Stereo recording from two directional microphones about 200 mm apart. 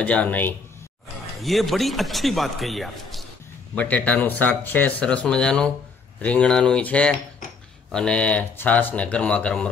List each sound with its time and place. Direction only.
0.0 s a man's voice: 10° left (ahead or behind)